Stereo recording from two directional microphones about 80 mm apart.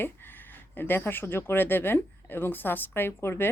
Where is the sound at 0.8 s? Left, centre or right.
Left.